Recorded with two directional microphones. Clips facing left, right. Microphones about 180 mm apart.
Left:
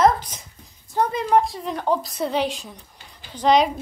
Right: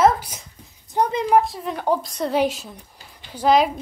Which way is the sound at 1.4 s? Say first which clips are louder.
Right 1 dB; centre (ahead or behind).